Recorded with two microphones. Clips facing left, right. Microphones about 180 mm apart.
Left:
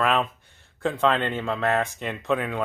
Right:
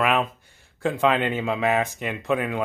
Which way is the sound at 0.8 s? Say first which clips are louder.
Right 1 dB; 5° right (ahead or behind).